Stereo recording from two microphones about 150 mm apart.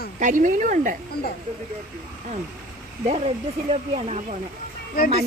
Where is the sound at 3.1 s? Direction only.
45° right (ahead or behind).